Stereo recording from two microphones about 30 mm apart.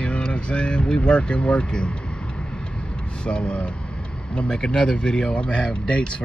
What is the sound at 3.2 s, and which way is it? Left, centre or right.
Speech, left.